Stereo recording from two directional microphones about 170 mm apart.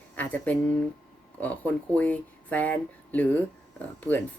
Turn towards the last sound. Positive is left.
turn(degrees=10)  # may be behind; listen again after turning